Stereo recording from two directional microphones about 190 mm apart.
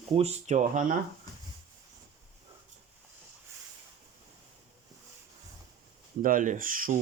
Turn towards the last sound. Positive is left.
turn(degrees=-45)  # may be behind; listen again after turning